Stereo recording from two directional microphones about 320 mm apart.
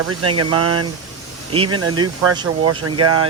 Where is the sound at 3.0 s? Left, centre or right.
Right.